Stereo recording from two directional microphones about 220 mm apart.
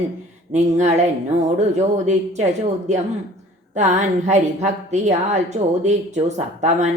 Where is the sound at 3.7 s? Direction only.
30° right (ahead or behind).